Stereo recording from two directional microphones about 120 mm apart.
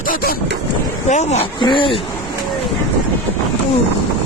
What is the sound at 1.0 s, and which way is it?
Speech, 75° left (ahead or behind).